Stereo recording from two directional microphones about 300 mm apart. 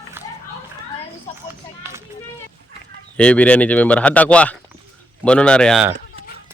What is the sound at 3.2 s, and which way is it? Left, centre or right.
Speech, centre.